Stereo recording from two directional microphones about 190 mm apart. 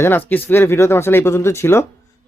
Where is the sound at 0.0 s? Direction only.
10° left (ahead or behind).